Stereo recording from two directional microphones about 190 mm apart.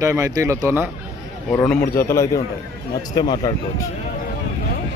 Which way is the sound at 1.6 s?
10° left (ahead or behind).